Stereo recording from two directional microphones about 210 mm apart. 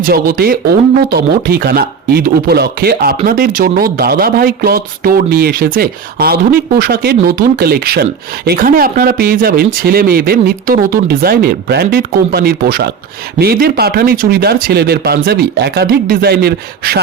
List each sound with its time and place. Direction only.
0.0 s speech: 45° right (ahead or behind)